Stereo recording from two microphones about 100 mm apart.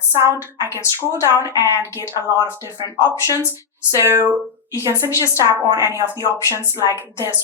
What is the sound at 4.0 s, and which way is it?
A woman's voice, 25° right (ahead or behind).